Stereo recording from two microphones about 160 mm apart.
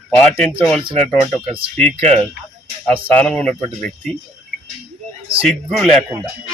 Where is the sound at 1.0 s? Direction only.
Centre (ahead or behind).